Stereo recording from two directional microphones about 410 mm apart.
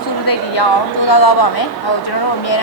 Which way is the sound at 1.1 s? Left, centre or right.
Left.